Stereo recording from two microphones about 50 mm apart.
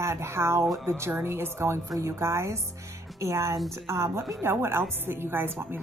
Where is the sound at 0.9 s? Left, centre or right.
Right.